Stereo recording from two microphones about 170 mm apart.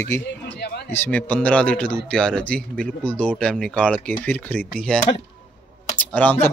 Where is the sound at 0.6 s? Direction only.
75° left (ahead or behind).